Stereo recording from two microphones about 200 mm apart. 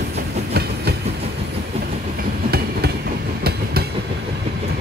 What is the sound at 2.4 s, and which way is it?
Train, 50° right (ahead or behind).